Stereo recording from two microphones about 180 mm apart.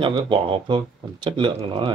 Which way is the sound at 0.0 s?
30° right (ahead or behind).